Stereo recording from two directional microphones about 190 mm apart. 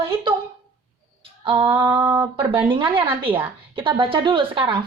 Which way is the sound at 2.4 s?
25° right (ahead or behind).